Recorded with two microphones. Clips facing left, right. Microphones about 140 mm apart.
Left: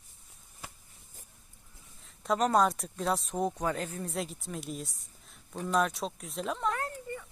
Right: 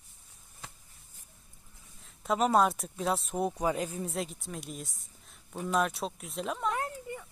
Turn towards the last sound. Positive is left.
turn(degrees=-15)  # may be behind; listen again after turning